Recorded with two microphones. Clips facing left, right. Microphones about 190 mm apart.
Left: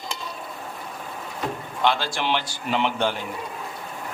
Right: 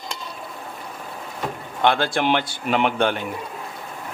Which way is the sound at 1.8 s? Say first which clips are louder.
Right 4 dB; 55° right (ahead or behind).